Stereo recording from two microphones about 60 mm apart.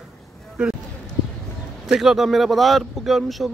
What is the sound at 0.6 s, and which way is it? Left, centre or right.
Speech, centre.